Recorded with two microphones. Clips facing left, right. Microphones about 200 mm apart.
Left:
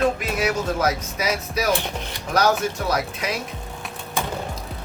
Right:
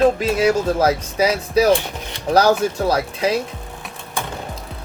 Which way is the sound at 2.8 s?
30° right (ahead or behind).